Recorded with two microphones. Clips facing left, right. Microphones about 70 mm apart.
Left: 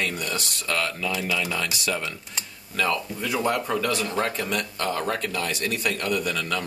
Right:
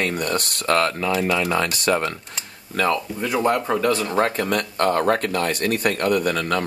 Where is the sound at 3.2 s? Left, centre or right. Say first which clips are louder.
Right 4 dB; right.